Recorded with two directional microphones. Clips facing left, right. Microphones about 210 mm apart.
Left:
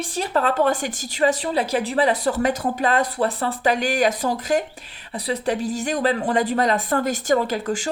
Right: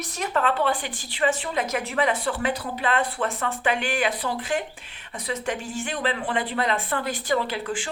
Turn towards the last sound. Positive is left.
turn(degrees=40)  # may be behind; listen again after turning